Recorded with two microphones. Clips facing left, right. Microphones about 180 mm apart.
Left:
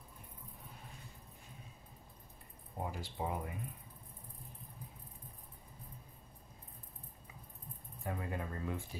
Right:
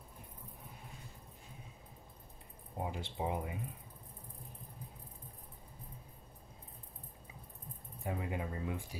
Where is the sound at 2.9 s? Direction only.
25° right (ahead or behind).